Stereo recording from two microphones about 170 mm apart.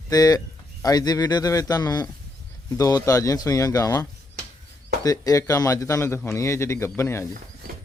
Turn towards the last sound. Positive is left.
turn(degrees=15)  # may be behind; listen again after turning